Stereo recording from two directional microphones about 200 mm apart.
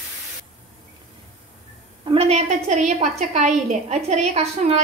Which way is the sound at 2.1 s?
30° right (ahead or behind).